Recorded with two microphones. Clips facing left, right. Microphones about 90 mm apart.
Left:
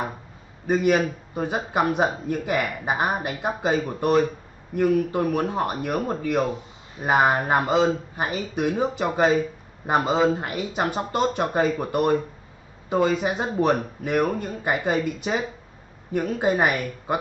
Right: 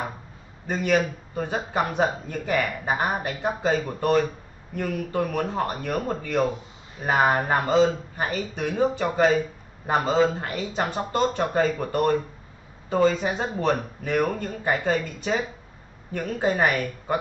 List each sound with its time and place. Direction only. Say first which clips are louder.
0.7 s a man's voice: left 3 dB; 15° left (ahead or behind)